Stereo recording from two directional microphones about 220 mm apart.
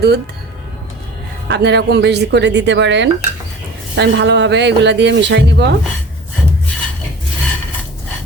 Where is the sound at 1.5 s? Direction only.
50° right (ahead or behind).